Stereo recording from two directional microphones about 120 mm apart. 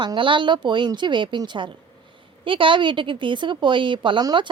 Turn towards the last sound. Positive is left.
turn(degrees=-40)  # may be behind; listen again after turning